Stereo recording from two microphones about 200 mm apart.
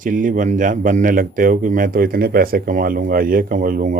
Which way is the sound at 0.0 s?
40° right (ahead or behind).